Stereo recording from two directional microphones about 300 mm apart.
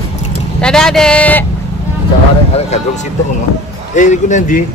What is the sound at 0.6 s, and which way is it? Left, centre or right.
Speech, centre.